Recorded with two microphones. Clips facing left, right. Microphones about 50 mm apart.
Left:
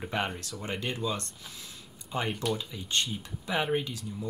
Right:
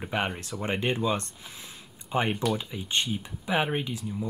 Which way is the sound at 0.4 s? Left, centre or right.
Right.